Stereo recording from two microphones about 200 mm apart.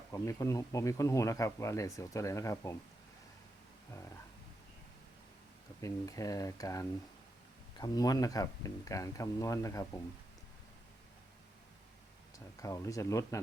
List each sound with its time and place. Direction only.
0.1 s speech: 15° left (ahead or behind)
5.8 s speech: 15° left (ahead or behind)
12.5 s speech: 15° left (ahead or behind)